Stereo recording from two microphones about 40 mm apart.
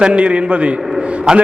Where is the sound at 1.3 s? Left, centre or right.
Centre.